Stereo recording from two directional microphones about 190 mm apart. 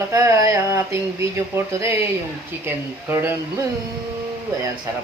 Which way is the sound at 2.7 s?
10° right (ahead or behind).